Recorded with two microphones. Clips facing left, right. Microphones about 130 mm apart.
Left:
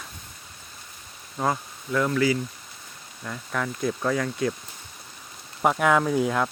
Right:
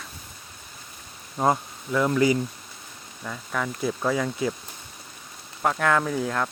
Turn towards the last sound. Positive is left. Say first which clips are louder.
# left 3 dB
turn(degrees=10)  # may be behind; listen again after turning